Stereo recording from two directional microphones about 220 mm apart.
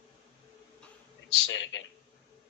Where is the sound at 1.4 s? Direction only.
55° left (ahead or behind).